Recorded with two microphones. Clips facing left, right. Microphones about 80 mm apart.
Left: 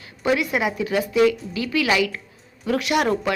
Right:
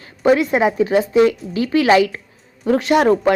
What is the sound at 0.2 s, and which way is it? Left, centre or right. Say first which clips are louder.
A woman's voice: right 7 dB; right.